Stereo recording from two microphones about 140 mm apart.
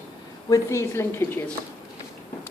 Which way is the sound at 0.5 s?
20° left (ahead or behind).